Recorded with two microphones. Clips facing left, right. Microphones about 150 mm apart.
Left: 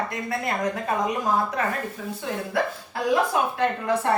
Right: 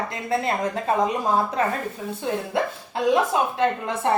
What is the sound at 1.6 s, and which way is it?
Speech, 30° right (ahead or behind).